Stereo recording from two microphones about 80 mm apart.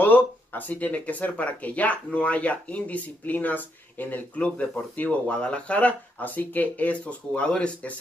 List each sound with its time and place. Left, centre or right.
0.0 s speech: left